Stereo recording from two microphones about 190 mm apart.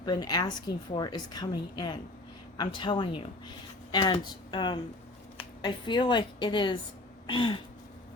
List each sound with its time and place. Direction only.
0.0 s a woman's voice: 20° left (ahead or behind)